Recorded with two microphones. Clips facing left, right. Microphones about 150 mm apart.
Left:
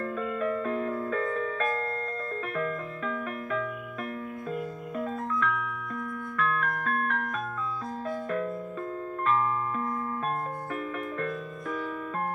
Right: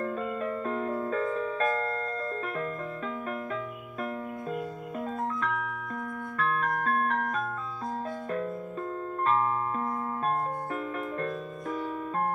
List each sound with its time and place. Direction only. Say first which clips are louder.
0.0 s music: left 1 dB; 30° right (ahead or behind)
5.4 s music: left 1 dB; 35° right (ahead or behind)
9.2 s music: even; 35° right (ahead or behind)